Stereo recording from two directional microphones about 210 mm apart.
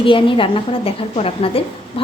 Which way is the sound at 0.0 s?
25° left (ahead or behind).